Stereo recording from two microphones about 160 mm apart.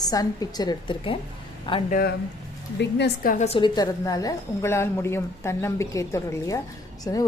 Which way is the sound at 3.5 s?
30° left (ahead or behind).